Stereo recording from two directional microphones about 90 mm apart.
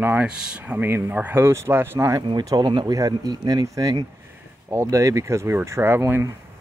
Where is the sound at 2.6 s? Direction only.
55° right (ahead or behind).